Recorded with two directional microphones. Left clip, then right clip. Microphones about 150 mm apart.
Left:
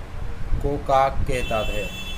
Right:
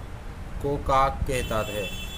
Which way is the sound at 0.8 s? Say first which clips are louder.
Left 3 dB; 25° right (ahead or behind).